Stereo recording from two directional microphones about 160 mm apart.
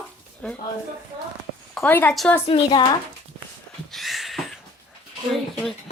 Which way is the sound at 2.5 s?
30° left (ahead or behind).